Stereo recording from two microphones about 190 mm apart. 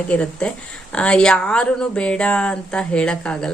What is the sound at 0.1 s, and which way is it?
Speech, 5° left (ahead or behind).